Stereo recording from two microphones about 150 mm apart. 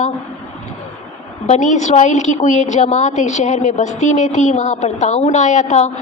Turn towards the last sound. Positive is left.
turn(degrees=50)  # may be behind; listen again after turning